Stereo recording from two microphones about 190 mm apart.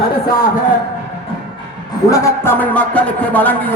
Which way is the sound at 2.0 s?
15° left (ahead or behind).